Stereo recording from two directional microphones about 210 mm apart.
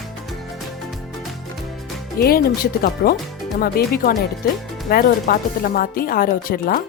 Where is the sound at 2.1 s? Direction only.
45° left (ahead or behind).